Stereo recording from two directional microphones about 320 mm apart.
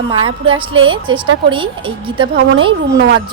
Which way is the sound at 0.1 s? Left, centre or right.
Centre.